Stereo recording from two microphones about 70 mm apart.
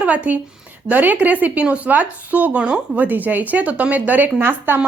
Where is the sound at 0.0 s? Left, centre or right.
Right.